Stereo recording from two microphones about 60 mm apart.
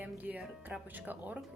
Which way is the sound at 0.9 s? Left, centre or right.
Right.